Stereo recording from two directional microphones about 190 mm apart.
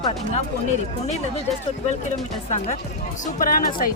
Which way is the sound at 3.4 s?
50° left (ahead or behind).